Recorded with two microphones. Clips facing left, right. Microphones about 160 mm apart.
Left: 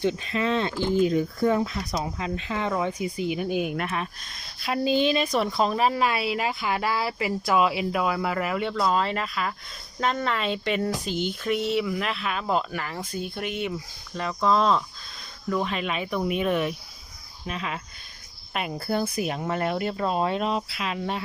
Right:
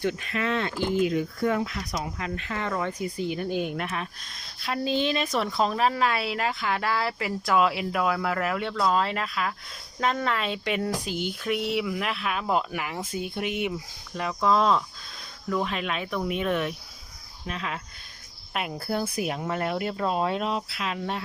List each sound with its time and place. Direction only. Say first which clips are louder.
0.0 s speech: left 3 dB; 25° left (ahead or behind); by 21.2 s 5° left (ahead or behind)